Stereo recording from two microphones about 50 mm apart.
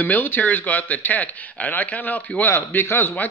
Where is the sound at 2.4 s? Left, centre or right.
Left.